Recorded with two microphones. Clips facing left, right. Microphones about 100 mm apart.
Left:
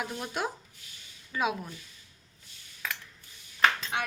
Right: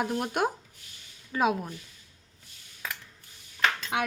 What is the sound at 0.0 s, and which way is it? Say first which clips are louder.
Speech: right 6 dB; 50° right (ahead or behind).